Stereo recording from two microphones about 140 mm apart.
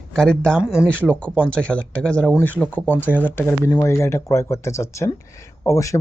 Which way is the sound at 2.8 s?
15° right (ahead or behind).